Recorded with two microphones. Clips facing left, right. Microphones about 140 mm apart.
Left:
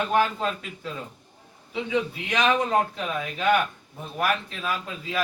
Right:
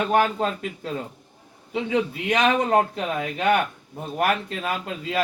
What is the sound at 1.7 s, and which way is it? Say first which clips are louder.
A man's voice: right 3 dB; 55° right (ahead or behind).